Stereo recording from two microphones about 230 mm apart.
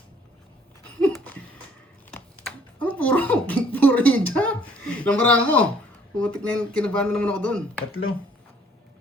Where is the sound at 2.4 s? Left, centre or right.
Centre.